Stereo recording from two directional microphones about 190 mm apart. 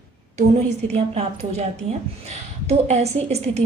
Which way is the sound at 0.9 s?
35° right (ahead or behind).